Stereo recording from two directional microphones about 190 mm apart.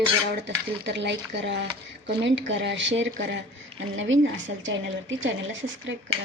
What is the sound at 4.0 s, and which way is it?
A woman's voice, 80° right.